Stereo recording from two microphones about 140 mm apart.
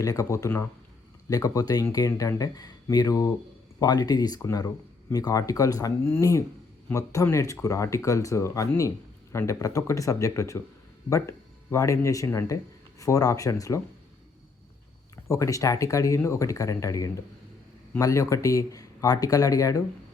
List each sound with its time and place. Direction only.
0.0 s speech: 25° left (ahead or behind)
15.3 s speech: 20° left (ahead or behind)